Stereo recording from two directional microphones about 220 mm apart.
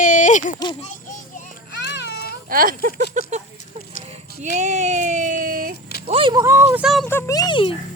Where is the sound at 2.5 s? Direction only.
40° right (ahead or behind).